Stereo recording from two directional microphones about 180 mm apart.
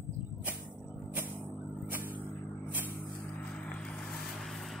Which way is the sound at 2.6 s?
10° right (ahead or behind).